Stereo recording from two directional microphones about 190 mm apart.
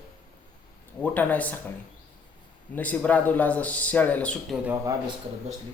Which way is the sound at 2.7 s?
10° left (ahead or behind).